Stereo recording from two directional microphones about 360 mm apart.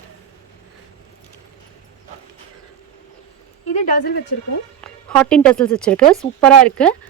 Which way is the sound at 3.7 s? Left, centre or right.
Left.